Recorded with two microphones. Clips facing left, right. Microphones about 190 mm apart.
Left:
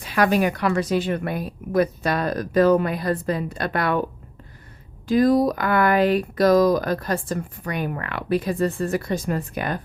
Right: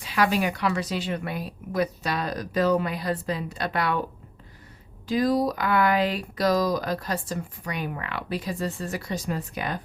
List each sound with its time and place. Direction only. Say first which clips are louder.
0.0 s speech: left 4 dB; 50° left (ahead or behind)
5.0 s speech: left 5 dB; 50° left (ahead or behind)